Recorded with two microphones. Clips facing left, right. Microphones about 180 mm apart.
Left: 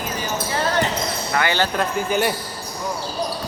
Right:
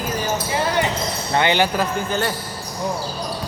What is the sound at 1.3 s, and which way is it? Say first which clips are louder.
Speech: right 3 dB; 20° right (ahead or behind).